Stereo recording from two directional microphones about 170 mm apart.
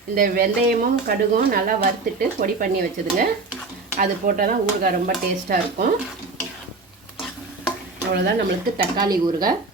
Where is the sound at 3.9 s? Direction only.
50° right (ahead or behind).